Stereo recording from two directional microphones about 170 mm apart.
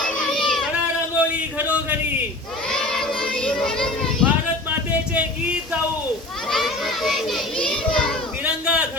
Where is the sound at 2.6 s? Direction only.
5° left (ahead or behind).